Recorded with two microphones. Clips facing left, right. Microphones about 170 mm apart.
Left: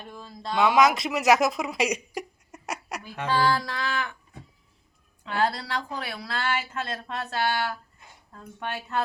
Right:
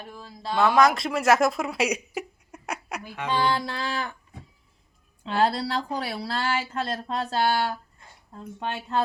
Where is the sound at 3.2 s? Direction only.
20° right (ahead or behind).